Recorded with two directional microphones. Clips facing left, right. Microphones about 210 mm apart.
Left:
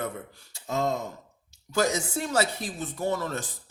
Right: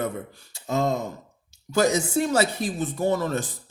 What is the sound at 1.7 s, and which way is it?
A man's voice, 15° right (ahead or behind).